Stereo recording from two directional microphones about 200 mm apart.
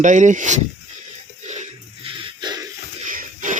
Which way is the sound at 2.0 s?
25° right (ahead or behind).